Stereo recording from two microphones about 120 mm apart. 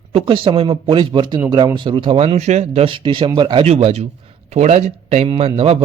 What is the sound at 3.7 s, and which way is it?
Speech, 65° right (ahead or behind).